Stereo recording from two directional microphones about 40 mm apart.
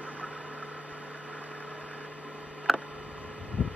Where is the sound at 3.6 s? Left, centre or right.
Left.